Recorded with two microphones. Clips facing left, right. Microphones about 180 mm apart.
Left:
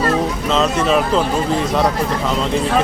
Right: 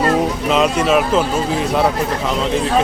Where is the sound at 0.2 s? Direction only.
15° right (ahead or behind).